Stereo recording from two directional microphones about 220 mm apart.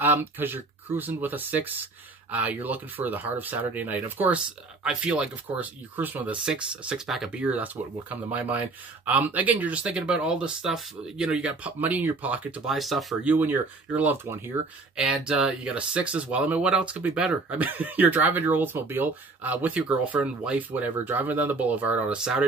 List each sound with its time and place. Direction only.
0.0 s speech: 10° right (ahead or behind)